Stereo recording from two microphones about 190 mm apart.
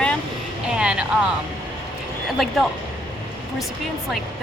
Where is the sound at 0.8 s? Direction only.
5° right (ahead or behind).